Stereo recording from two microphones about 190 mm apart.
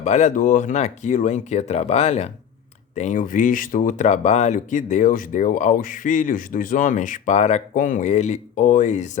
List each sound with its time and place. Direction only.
0.0 s speech: 35° left (ahead or behind)